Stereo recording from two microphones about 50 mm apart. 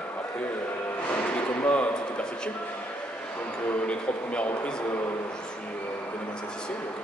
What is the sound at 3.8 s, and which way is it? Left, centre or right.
A man's voice, left.